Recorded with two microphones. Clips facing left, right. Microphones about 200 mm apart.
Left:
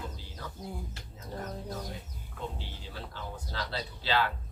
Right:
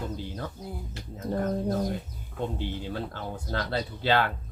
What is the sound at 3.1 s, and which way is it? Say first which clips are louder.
Speech: right 7 dB; 55° right (ahead or behind).